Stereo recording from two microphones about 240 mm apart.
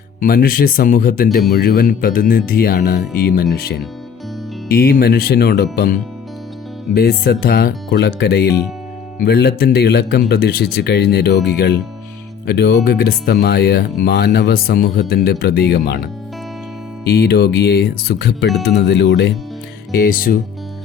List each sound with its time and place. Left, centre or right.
0.2 s speech: left
17.1 s speech: left